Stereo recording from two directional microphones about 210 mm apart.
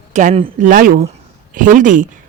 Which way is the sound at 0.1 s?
35° right (ahead or behind).